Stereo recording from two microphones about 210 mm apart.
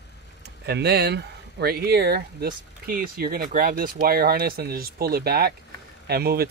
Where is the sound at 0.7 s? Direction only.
50° right (ahead or behind).